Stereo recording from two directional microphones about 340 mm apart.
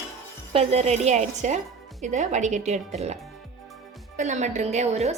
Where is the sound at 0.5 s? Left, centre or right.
Centre.